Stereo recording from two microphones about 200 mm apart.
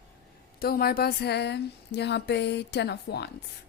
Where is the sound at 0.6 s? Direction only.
50° left (ahead or behind).